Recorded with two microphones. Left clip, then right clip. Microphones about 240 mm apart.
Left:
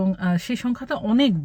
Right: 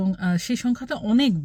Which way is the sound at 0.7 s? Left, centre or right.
Left.